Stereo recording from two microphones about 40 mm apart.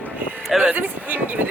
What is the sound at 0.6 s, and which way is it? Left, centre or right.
Speech, right.